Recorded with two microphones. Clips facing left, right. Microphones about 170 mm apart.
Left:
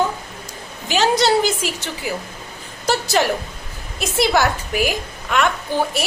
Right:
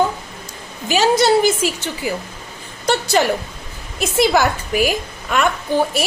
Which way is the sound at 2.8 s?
Centre (ahead or behind).